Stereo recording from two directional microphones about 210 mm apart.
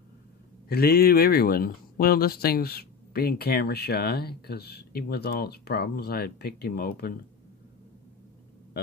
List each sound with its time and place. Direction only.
0.7 s speech: 45° left (ahead or behind)